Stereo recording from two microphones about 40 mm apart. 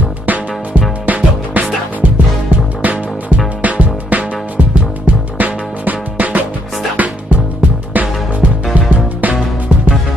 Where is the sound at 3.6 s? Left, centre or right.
Right.